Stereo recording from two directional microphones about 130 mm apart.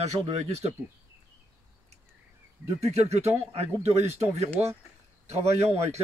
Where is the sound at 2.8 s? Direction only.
55° right (ahead or behind).